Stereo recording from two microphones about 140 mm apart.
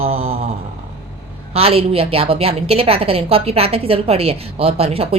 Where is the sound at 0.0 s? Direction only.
45° right (ahead or behind).